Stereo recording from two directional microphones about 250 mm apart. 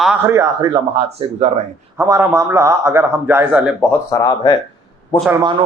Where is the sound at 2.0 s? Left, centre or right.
Centre.